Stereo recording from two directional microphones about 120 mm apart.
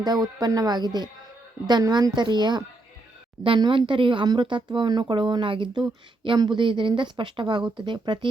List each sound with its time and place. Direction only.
0.0 s speech: 35° right (ahead or behind)